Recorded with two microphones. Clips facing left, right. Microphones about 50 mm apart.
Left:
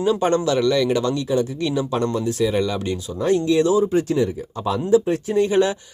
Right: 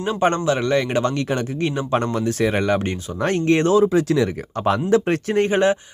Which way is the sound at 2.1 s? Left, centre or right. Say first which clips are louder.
Even; right.